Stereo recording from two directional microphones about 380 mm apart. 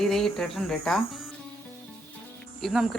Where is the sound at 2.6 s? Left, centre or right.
Centre.